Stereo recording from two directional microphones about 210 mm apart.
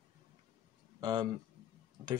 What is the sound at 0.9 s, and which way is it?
Speech, 20° right (ahead or behind).